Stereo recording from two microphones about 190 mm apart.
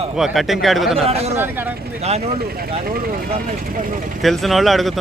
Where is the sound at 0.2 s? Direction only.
Centre (ahead or behind).